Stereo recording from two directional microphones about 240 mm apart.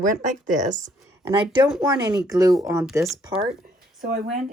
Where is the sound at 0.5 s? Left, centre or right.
Right.